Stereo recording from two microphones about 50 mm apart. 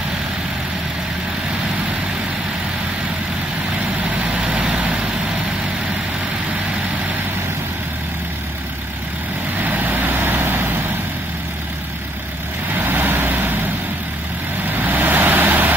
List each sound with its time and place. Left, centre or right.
4.1 s vehicle: right
4.6 s vehicle: right
9.6 s vehicle: right
12.7 s vehicle: right
14.8 s vehicle: right